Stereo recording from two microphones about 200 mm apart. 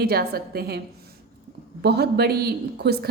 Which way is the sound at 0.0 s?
50° right (ahead or behind).